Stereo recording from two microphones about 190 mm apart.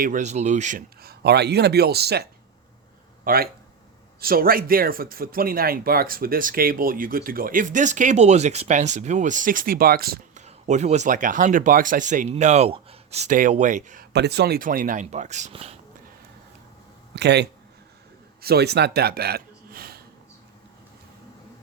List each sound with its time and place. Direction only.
0.0 s speech: 40° right (ahead or behind)
1.0 s speech: 60° right (ahead or behind)
3.2 s speech: 50° right (ahead or behind)
10.4 s speech: 35° right (ahead or behind)
14.1 s speech: 60° right (ahead or behind); by 15.8 s 35° right (ahead or behind)
17.2 s speech: 60° right (ahead or behind)